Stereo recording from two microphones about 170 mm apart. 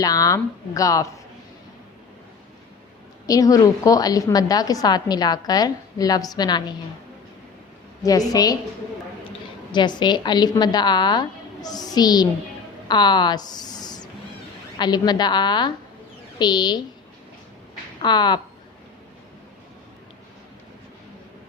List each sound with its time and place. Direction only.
0.0 s a woman's voice: 20° left (ahead or behind)
3.2 s a woman's voice: 20° left (ahead or behind)
8.3 s a woman's voice: 20° left (ahead or behind)
9.7 s a woman's voice: 25° left (ahead or behind)
18.0 s a woman's voice: 25° left (ahead or behind)